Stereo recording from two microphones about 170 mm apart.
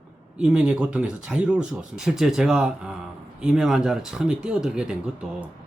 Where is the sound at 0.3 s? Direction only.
5° right (ahead or behind).